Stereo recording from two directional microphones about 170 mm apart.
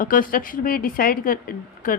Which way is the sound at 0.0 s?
55° left (ahead or behind).